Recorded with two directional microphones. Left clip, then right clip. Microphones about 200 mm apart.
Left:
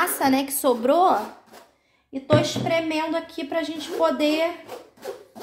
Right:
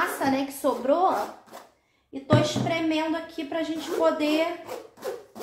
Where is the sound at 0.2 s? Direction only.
55° left (ahead or behind).